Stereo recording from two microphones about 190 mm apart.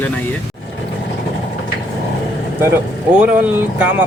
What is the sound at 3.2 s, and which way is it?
Speech, 10° right (ahead or behind).